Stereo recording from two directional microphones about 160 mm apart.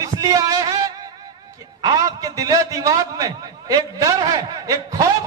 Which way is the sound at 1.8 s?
20° right (ahead or behind).